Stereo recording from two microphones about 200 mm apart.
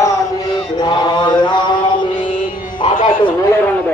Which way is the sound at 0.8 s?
20° left (ahead or behind).